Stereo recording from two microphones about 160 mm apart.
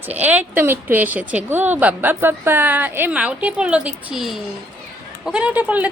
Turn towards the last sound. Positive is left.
turn(degrees=-10)  # may be behind; listen again after turning